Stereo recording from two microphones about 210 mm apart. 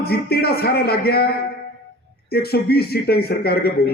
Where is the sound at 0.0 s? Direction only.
50° left (ahead or behind).